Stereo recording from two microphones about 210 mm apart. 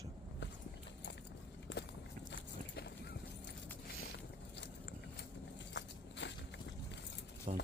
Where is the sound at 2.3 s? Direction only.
55° left (ahead or behind).